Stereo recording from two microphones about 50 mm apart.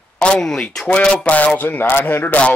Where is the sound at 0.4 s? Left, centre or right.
Centre.